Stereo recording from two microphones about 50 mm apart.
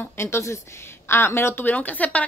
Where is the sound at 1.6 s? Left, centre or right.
Left.